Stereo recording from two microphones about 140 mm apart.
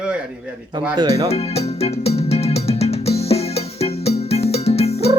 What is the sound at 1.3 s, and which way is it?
Music, 45° left (ahead or behind).